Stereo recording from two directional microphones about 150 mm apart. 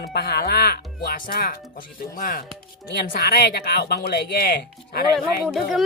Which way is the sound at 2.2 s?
75° left (ahead or behind).